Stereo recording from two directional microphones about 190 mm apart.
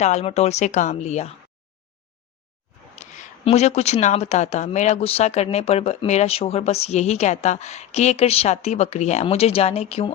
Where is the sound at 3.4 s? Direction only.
35° left (ahead or behind).